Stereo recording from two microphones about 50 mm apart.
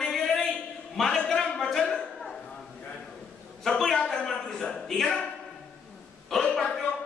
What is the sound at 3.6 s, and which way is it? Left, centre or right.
A man's voice, centre.